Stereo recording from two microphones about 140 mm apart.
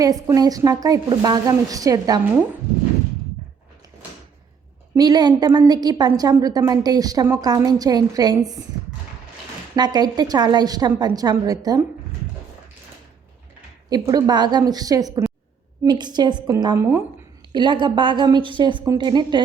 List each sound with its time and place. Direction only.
0.0 s a woman's voice: 25° right (ahead or behind)
4.9 s a woman's voice: 30° right (ahead or behind)
9.7 s a woman's voice: 30° right (ahead or behind)
13.9 s a woman's voice: 25° right (ahead or behind)
16.7 s a woman's voice: 15° right (ahead or behind)
17.5 s a woman's voice: 35° right (ahead or behind)